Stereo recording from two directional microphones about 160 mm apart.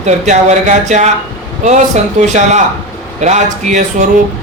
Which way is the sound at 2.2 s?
50° right (ahead or behind).